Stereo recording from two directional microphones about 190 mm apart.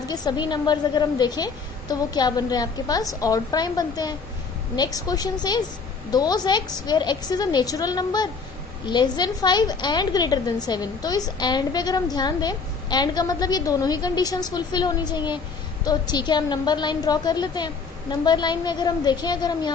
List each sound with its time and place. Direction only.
0.1 s a woman's voice: 20° left (ahead or behind)